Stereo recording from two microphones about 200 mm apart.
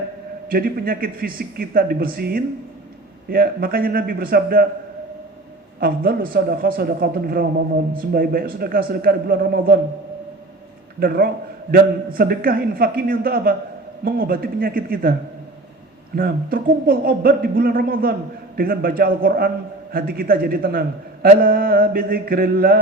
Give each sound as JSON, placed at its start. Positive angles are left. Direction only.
{"t": 0.4, "sound": "speech", "side_deg": -45}
{"t": 5.8, "sound": "speech", "side_deg": -45}
{"t": 11.0, "sound": "speech", "side_deg": -45}
{"t": 16.1, "sound": "speech", "side_deg": -45}